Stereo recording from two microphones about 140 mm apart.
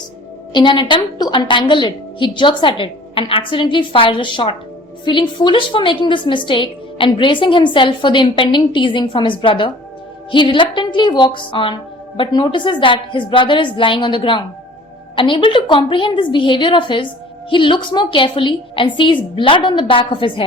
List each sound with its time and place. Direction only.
0.5 s a woman's voice: 35° left (ahead or behind)